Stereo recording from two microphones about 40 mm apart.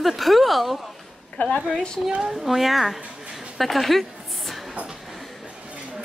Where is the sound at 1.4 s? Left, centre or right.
Left.